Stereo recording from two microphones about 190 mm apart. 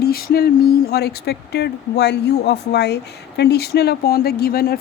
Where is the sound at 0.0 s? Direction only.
55° left (ahead or behind).